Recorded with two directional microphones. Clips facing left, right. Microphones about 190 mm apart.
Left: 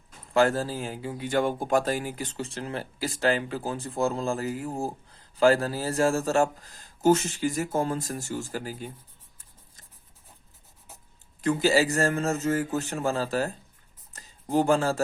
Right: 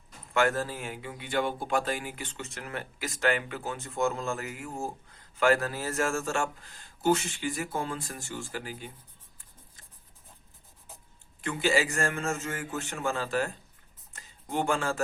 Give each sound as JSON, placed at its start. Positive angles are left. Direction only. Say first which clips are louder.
{"t": 0.3, "sound": "speech", "louder": "left 4 dB", "side_deg": 30}
{"t": 11.3, "sound": "speech", "louder": "left 5 dB", "side_deg": 40}
{"t": 14.1, "sound": "a sound", "louder": "left 8 dB", "side_deg": 35}